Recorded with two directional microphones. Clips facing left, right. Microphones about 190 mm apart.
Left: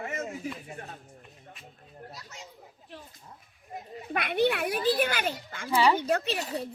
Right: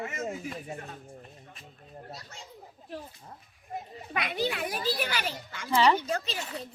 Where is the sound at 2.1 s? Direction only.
35° right (ahead or behind).